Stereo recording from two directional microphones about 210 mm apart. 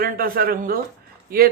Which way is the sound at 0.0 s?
45° right (ahead or behind).